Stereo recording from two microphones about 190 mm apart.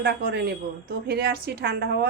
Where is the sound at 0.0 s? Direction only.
55° right (ahead or behind).